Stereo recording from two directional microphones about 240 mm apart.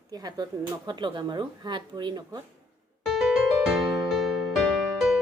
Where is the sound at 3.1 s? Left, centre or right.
Centre.